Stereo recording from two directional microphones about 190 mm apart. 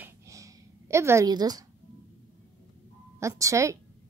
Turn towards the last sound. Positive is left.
turn(degrees=-15)  # may be behind; listen again after turning